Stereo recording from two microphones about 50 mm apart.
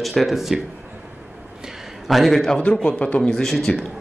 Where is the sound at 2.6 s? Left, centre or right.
Left.